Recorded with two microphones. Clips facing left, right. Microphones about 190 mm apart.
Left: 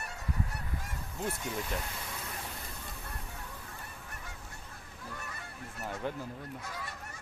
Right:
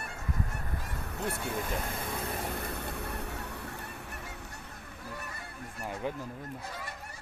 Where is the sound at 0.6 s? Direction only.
55° right (ahead or behind).